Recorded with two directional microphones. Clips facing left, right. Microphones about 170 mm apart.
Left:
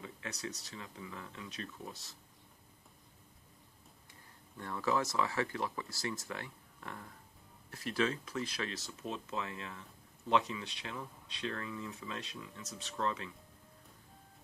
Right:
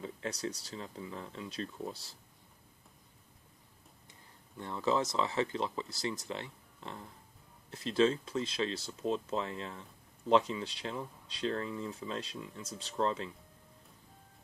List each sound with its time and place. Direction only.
0.0 s speech: 30° right (ahead or behind)
4.6 s speech: 20° right (ahead or behind)